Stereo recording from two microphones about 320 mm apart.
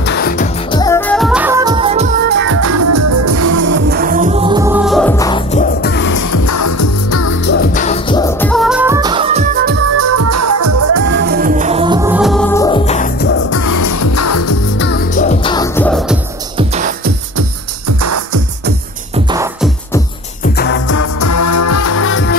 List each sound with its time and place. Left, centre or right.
0.0 s music: left
0.7 s music: centre; by 3.6 s right
3.6 s music: right; by 6.1 s left
6.1 s music: left
7.4 s music: left; by 10.0 s right
10.1 s music: right
11.1 s music: right; by 13.3 s left
13.6 s music: left
14.8 s music: left; by 16.2 s centre
16.5 s music: right
17.8 s music: right
19.1 s music: centre
20.5 s music: left
20.9 s music: left